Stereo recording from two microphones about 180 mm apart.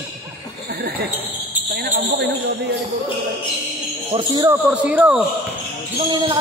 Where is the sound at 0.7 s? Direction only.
60° right (ahead or behind).